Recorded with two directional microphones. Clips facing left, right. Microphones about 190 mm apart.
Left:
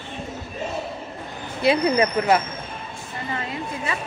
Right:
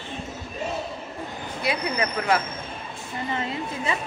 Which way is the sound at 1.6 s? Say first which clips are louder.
Left 8 dB; 25° left (ahead or behind).